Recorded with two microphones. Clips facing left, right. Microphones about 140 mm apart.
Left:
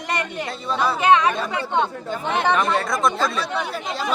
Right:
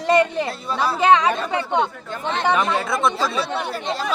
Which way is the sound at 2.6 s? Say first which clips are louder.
Even; centre (ahead or behind).